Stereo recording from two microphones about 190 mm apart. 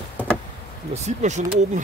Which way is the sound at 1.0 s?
40° right (ahead or behind).